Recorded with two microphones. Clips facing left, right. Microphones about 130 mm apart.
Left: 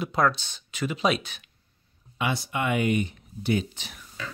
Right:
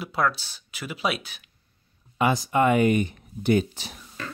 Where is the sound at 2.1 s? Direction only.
40° right (ahead or behind).